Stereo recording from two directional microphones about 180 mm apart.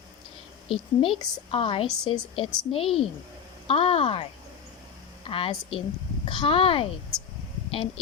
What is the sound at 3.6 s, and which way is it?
A woman's voice, 30° left (ahead or behind).